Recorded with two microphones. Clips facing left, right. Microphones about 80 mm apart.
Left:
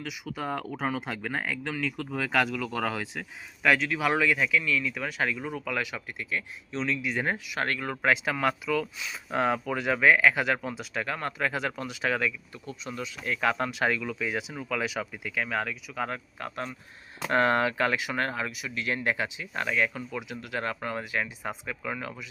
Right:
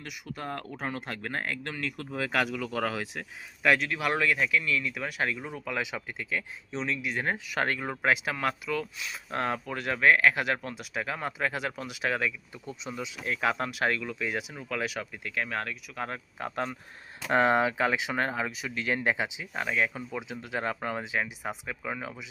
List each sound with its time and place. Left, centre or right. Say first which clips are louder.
0.3 s speech: left 4 dB; centre
5.8 s speech: even; right
6.8 s speech: left 2 dB; centre
7.4 s speech: right 1 dB; right
7.7 s speech: even; centre
8.0 s speech: left 2 dB; centre
12.6 s speech: even; centre
17.3 s speech: even; centre
20.1 s speech: even; right